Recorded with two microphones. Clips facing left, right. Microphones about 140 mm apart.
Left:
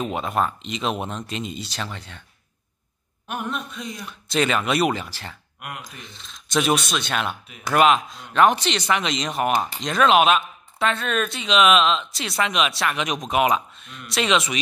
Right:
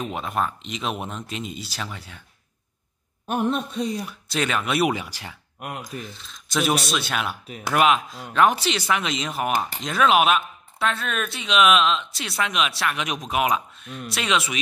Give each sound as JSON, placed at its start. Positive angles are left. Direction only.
{"t": 0.1, "sound": "speech", "side_deg": 0}
{"t": 3.3, "sound": "a man's voice", "side_deg": -30}
{"t": 4.3, "sound": "speech", "side_deg": 0}
{"t": 5.6, "sound": "a man's voice", "side_deg": -35}
{"t": 5.9, "sound": "speech", "side_deg": -5}